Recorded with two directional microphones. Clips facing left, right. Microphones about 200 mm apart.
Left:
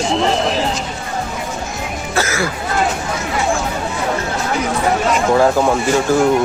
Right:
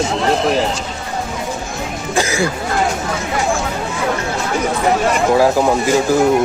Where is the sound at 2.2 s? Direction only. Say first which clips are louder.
Right 2 dB; 15° right (ahead or behind).